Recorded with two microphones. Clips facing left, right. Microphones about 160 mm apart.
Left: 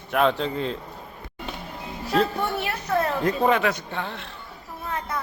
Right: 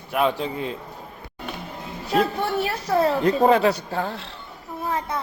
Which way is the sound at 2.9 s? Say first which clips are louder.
Right 4 dB; 30° right (ahead or behind).